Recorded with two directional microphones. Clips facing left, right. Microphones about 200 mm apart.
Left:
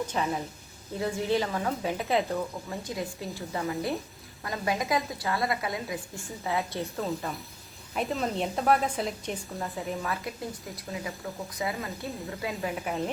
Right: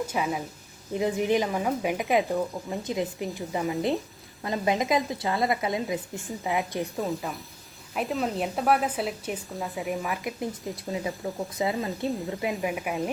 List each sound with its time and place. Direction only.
0.0 s a woman's voice: 10° right (ahead or behind)
7.0 s a woman's voice: centre (ahead or behind)
9.7 s a woman's voice: 15° right (ahead or behind)
11.5 s a woman's voice: 20° right (ahead or behind)